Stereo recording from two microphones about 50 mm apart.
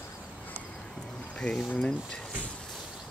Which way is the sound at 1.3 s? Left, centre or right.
Centre.